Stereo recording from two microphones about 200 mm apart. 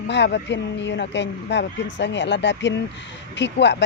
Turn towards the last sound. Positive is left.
turn(degrees=60)  # may be behind; listen again after turning